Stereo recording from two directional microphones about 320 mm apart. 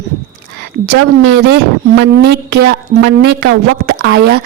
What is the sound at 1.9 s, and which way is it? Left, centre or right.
A woman's voice, right.